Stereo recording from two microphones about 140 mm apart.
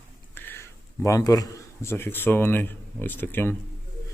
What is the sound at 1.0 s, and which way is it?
Speech, 25° left (ahead or behind).